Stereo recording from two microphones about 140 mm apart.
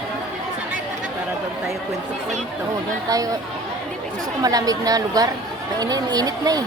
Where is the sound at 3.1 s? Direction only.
25° right (ahead or behind).